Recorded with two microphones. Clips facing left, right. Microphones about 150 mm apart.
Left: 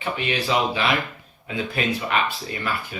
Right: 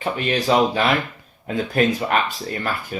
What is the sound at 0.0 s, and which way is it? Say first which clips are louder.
Speech: right 4 dB; 45° right (ahead or behind).